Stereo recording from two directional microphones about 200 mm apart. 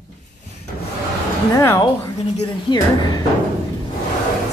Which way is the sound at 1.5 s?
15° left (ahead or behind).